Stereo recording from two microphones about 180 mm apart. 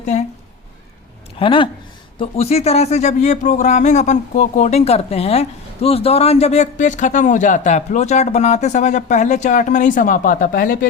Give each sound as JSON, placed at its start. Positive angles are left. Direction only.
{"t": 0.1, "sound": "speech", "side_deg": 40}
{"t": 1.4, "sound": "speech", "side_deg": 30}